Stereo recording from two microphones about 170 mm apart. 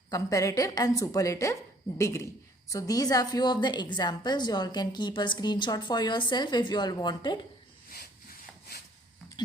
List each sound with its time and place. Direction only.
0.1 s a woman's voice: 20° left (ahead or behind)